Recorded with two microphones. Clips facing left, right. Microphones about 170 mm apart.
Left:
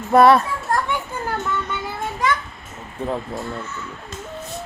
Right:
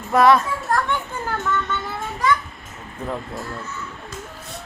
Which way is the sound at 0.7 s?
15° left (ahead or behind).